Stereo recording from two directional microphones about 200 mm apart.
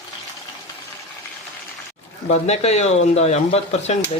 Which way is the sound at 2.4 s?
30° left (ahead or behind).